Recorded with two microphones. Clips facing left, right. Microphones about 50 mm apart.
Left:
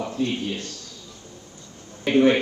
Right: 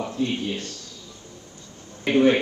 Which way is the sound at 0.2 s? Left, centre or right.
Right.